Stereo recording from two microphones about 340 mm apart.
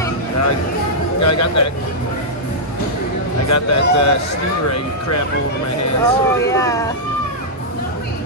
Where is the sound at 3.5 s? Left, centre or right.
Left.